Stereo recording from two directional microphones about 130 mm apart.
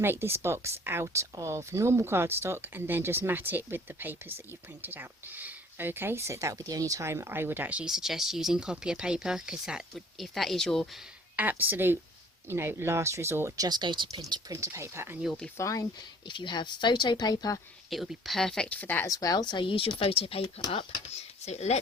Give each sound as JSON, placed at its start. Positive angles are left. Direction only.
{"t": 0.0, "sound": "speech", "side_deg": -15}
{"t": 11.3, "sound": "speech", "side_deg": -15}
{"t": 13.7, "sound": "speech", "side_deg": -35}
{"t": 15.2, "sound": "speech", "side_deg": 0}
{"t": 15.5, "sound": "speech", "side_deg": 25}
{"t": 16.3, "sound": "speech", "side_deg": 35}
{"t": 17.9, "sound": "speech", "side_deg": 0}
{"t": 19.0, "sound": "speech", "side_deg": 25}